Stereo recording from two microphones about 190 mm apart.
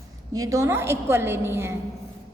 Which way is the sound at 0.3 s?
20° right (ahead or behind).